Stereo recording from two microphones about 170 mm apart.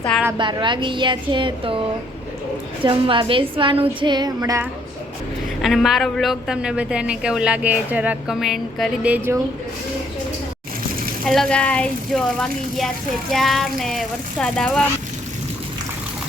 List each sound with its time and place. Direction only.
0.3 s a woman's voice: 30° right (ahead or behind)
2.8 s a woman's voice: 30° right (ahead or behind)
5.6 s a woman's voice: centre (ahead or behind)
11.3 s a woman's voice: 5° left (ahead or behind)